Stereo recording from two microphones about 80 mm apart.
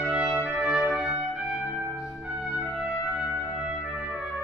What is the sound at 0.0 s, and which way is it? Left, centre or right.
Brass instrument, centre.